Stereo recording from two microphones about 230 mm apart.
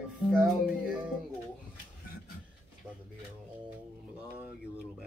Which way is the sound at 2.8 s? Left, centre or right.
Centre.